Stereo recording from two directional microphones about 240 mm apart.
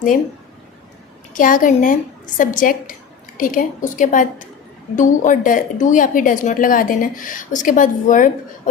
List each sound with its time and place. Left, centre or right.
1.3 s a woman's voice: left